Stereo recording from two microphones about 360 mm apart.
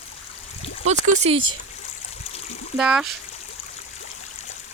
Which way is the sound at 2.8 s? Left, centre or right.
Centre.